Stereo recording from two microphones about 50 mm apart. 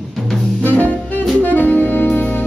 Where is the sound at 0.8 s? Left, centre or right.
Left.